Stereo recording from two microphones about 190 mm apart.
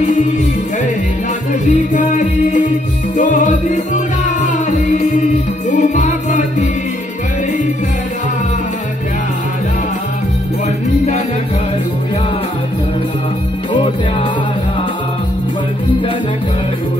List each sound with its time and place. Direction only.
1.5 s music: 40° left (ahead or behind)